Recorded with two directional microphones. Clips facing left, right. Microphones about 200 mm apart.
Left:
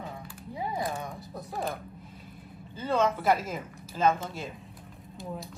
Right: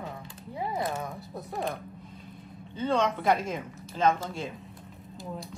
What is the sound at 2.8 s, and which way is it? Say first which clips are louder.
Speech: even; 5° left (ahead or behind).